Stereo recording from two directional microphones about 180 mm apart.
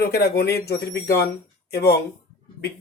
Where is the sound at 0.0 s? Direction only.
60° left (ahead or behind).